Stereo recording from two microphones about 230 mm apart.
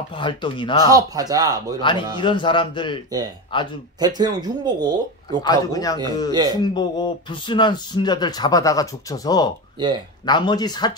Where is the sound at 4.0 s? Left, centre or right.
Centre.